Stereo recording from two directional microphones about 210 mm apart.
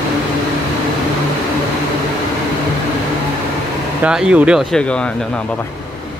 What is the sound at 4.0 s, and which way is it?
Speech, 5° right (ahead or behind).